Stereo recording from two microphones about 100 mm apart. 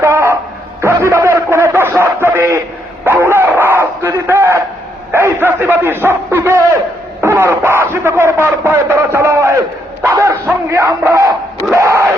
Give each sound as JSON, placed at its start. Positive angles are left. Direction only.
{"t": 0.0, "sound": "a sound", "side_deg": -25}
{"t": 3.0, "sound": "bow-wow", "side_deg": -20}
{"t": 5.1, "sound": "a man's voice", "side_deg": -20}
{"t": 10.0, "sound": "bow-wow", "side_deg": -30}
{"t": 11.7, "sound": "crowd", "side_deg": -30}